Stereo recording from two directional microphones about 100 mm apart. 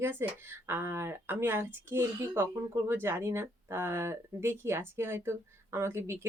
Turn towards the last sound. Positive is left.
turn(degrees=-25)  # may be behind; listen again after turning